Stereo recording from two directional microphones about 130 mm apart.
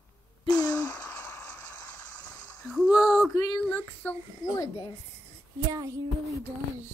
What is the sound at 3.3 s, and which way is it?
Speech, 35° left (ahead or behind).